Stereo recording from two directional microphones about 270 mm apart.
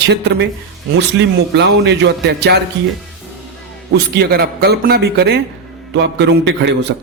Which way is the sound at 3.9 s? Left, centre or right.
Right.